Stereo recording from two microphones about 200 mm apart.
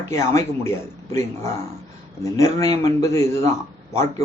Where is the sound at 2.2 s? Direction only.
15° left (ahead or behind).